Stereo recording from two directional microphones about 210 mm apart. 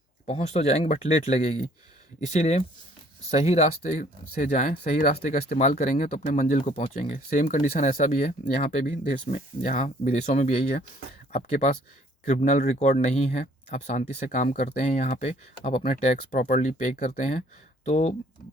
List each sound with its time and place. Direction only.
0.3 s speech: 30° left (ahead or behind)